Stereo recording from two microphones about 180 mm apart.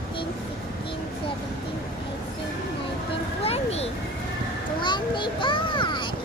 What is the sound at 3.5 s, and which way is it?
A child's voice, 35° left (ahead or behind).